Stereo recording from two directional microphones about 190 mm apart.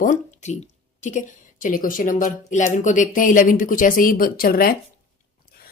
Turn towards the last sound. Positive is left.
turn(degrees=50)  # may be behind; listen again after turning